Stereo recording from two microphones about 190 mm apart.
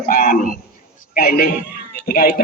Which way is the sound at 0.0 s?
50° left (ahead or behind).